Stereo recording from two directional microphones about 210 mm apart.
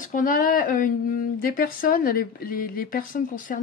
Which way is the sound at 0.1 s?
40° left (ahead or behind).